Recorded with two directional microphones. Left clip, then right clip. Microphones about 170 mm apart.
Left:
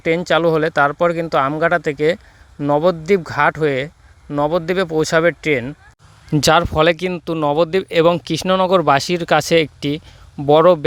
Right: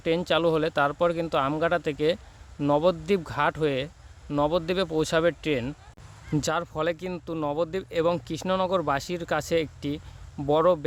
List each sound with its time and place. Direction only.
0.0 s speech: 35° left (ahead or behind)
6.3 s speech: 50° left (ahead or behind)